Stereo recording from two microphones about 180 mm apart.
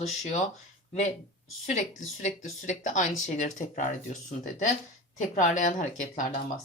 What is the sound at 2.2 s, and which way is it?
A woman's voice, 45° left (ahead or behind).